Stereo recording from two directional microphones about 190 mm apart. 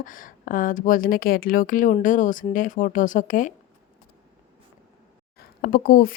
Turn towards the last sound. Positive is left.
turn(degrees=50)  # may be behind; listen again after turning